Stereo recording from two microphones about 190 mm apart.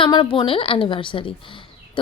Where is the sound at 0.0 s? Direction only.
25° left (ahead or behind).